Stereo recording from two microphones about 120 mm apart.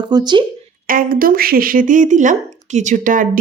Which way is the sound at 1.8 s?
90° right.